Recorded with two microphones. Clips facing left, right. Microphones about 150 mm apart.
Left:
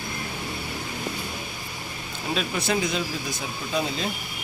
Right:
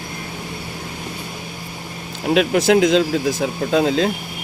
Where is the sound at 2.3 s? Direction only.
75° right (ahead or behind); by 4.1 s 90° right.